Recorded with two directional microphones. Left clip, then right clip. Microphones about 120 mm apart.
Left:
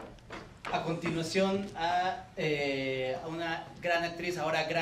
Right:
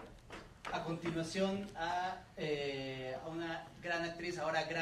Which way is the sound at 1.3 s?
25° left (ahead or behind).